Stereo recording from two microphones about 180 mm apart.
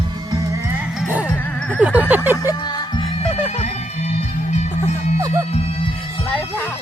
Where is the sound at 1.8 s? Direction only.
10° right (ahead or behind).